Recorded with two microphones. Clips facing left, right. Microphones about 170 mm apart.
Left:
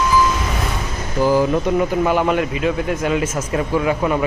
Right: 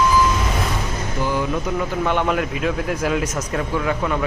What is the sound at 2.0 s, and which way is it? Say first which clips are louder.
A man's voice: left 3 dB; 5° left (ahead or behind).